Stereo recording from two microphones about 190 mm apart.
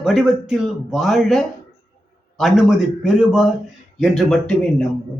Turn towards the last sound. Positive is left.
turn(degrees=5)  # may be behind; listen again after turning